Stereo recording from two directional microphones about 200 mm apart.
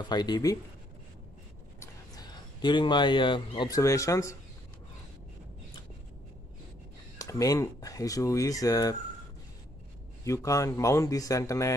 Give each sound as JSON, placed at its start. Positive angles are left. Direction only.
{"t": 0.0, "sound": "speech", "side_deg": 20}
{"t": 1.8, "sound": "speech", "side_deg": 20}
{"t": 7.2, "sound": "speech", "side_deg": 15}
{"t": 10.2, "sound": "speech", "side_deg": 15}